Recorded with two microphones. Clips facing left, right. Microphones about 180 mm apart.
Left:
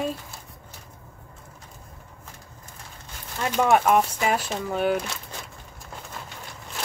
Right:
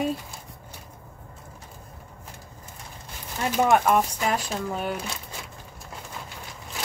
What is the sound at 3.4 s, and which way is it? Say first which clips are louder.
Speech: even; centre (ahead or behind).